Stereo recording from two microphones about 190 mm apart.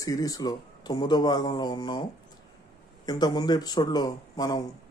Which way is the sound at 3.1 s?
20° left (ahead or behind).